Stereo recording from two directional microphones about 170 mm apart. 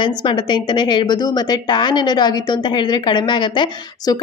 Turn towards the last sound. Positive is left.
turn(degrees=25)  # may be behind; listen again after turning